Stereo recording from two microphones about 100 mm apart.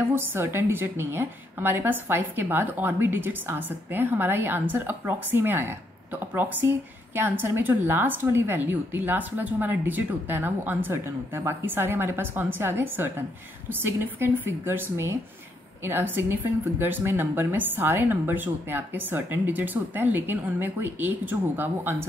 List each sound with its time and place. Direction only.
0.1 s a woman's voice: 20° right (ahead or behind)